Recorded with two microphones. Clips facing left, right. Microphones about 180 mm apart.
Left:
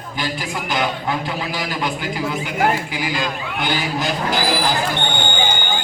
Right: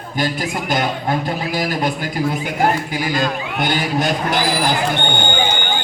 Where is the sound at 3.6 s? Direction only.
55° right (ahead or behind).